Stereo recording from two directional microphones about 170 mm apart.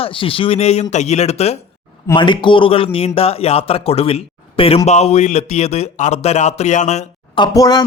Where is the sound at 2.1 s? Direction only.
30° left (ahead or behind); by 7.1 s 45° left (ahead or behind).